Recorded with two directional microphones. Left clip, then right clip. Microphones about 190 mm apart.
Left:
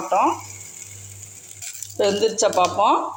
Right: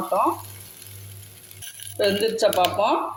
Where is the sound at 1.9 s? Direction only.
10° left (ahead or behind).